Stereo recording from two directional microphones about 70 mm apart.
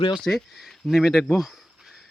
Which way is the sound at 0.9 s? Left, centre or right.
Centre.